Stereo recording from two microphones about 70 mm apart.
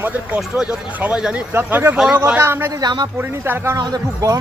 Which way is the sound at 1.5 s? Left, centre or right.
Right.